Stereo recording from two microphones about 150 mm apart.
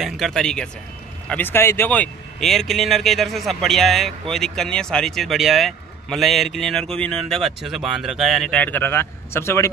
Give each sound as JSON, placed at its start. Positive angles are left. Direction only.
{"t": 0.0, "sound": "speech", "side_deg": 0}
{"t": 1.3, "sound": "speech", "side_deg": 15}